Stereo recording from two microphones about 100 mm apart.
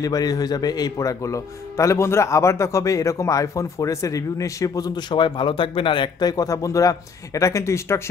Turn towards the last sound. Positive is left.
turn(degrees=30)  # may be behind; listen again after turning